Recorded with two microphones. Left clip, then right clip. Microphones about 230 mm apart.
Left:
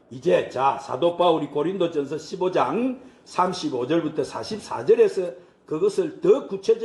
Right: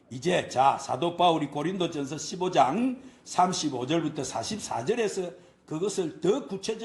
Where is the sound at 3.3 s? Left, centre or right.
Right.